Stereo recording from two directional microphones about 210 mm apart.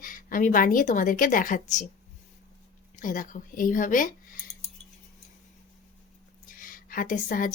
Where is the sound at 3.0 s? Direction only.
40° left (ahead or behind).